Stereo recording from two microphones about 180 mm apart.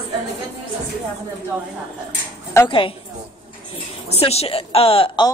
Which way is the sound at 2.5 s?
25° left (ahead or behind).